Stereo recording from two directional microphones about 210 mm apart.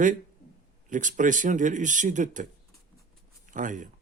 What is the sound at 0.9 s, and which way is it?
Speech, 35° right (ahead or behind).